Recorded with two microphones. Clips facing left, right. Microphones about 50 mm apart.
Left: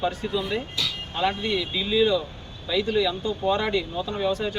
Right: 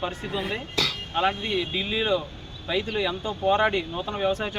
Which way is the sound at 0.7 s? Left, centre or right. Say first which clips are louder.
Right 3 dB; right.